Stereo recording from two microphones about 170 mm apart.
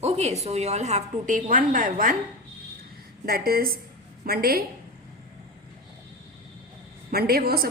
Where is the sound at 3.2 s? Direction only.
60° right (ahead or behind).